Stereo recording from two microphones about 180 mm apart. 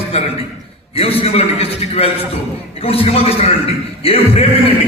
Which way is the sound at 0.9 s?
35° left (ahead or behind).